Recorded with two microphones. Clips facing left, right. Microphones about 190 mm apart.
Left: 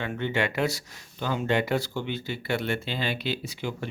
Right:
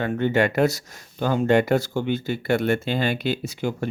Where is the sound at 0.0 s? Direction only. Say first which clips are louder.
Right 7 dB; 45° right (ahead or behind).